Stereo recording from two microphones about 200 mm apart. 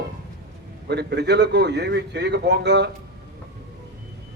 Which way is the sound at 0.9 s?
55° right (ahead or behind).